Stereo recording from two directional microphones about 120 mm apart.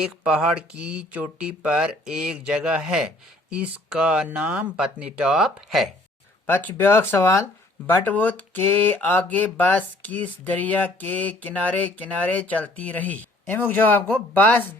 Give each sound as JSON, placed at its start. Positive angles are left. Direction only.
{"t": 0.0, "sound": "speech", "side_deg": -5}
{"t": 6.5, "sound": "speech", "side_deg": 15}